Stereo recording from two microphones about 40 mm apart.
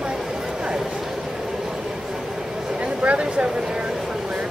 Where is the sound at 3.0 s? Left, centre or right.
Right.